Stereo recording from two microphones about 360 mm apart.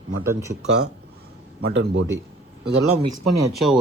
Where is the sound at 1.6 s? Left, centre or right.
Right.